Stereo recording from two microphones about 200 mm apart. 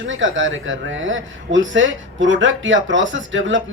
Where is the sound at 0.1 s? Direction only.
70° right (ahead or behind).